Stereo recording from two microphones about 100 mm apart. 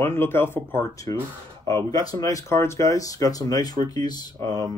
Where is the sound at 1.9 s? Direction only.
40° left (ahead or behind).